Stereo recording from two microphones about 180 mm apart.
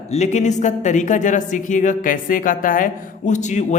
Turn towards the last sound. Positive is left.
turn(degrees=40)  # may be behind; listen again after turning